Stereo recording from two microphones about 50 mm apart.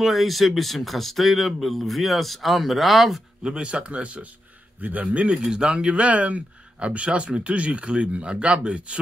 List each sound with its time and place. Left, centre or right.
0.0 s speech: centre
3.4 s speech: centre